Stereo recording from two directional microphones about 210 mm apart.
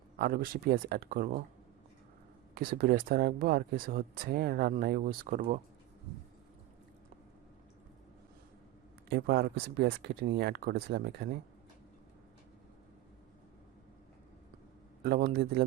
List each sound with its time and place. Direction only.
0.2 s speech: 45° right (ahead or behind)
2.6 s speech: 45° right (ahead or behind)
9.0 s speech: 50° right (ahead or behind)
15.0 s speech: 50° right (ahead or behind)